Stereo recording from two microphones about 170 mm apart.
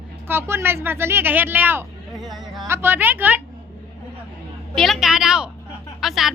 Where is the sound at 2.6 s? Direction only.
15° right (ahead or behind).